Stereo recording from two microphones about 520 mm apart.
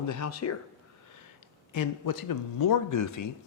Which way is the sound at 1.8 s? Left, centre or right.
Left.